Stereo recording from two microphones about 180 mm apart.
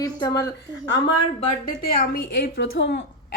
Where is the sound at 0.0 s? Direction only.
20° left (ahead or behind).